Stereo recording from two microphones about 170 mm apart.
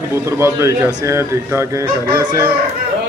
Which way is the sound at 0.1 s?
15° right (ahead or behind).